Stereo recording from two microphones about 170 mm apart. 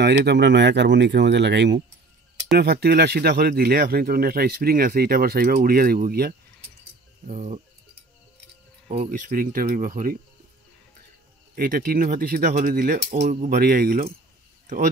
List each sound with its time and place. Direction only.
0.0 s speech: 80° right
2.5 s speech: 70° right (ahead or behind)
7.2 s speech: 40° right (ahead or behind)
9.3 s speech: 55° right (ahead or behind)
11.5 s speech: 55° right (ahead or behind)
13.5 s speech: 60° right (ahead or behind)